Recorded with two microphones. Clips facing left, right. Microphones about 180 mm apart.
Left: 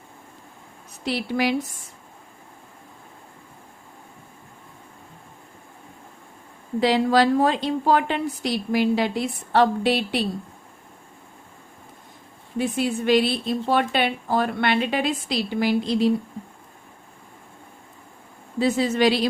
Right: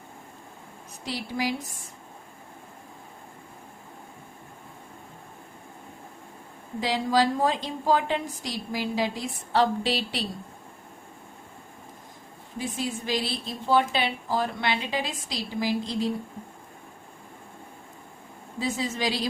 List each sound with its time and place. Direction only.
1.0 s a woman's voice: 70° left (ahead or behind)
6.7 s a woman's voice: 65° left (ahead or behind)
12.5 s a woman's voice: 70° left (ahead or behind)
18.6 s a woman's voice: 65° left (ahead or behind)